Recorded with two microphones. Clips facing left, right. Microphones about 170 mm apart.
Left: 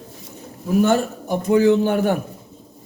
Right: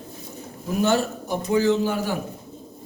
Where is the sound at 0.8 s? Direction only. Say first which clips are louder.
Left 3 dB; 50° left (ahead or behind).